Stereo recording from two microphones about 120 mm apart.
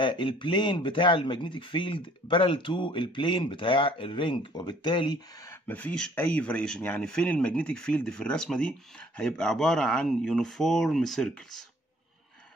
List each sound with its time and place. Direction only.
0.0 s speech: 45° left (ahead or behind)
5.4 s speech: 20° left (ahead or behind)